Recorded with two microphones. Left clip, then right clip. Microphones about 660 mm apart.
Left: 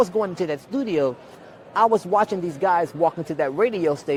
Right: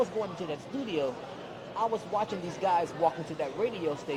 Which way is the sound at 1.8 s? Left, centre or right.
Left.